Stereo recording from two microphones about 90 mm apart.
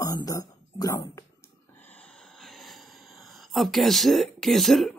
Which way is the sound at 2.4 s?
Centre (ahead or behind).